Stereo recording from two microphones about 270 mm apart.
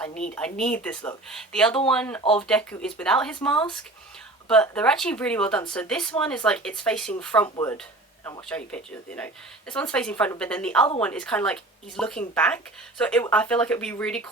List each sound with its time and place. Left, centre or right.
0.0 s speech: centre
2.2 s speech: centre
2.5 s speech: centre
7.4 s speech: centre
8.2 s speech: centre